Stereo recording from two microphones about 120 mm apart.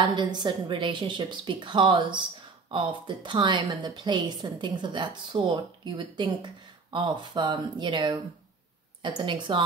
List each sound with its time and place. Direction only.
0.1 s speech: 40° right (ahead or behind)